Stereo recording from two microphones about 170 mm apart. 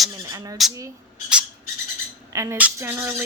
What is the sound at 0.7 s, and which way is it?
Speech, 20° right (ahead or behind).